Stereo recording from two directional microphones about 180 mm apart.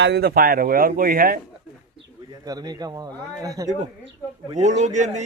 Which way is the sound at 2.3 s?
20° right (ahead or behind).